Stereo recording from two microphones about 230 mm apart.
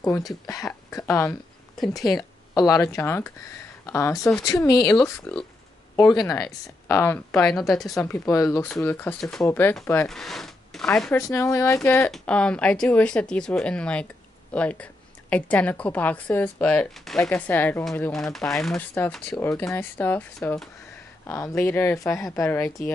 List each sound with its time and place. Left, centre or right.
0.2 s speech: centre
2.1 s speech: centre
4.8 s speech: centre